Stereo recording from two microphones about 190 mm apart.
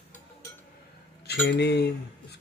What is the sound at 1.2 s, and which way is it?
Cutlery, 60° left (ahead or behind).